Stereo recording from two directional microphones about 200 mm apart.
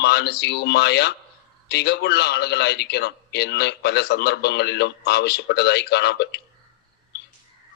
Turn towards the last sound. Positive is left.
turn(degrees=55)  # may be behind; listen again after turning